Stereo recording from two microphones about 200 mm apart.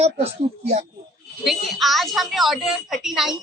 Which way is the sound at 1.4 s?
Centre (ahead or behind).